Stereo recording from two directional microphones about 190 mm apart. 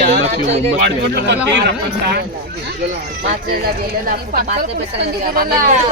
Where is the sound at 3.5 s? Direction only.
50° right (ahead or behind).